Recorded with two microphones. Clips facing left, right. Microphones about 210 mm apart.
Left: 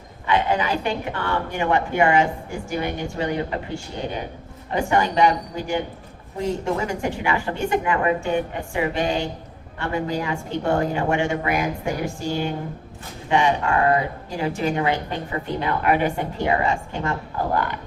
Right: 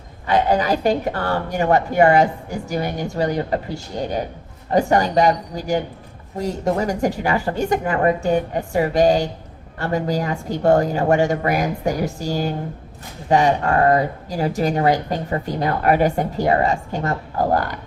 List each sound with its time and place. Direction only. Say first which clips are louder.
0.3 s speech: right 4 dB; 40° right (ahead or behind)
4.7 s speech: right 4 dB; 40° right (ahead or behind)